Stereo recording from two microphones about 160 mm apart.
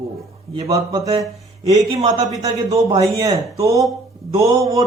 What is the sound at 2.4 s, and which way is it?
Speech, 20° right (ahead or behind).